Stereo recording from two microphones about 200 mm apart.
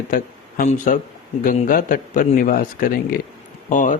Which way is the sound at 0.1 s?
40° left (ahead or behind).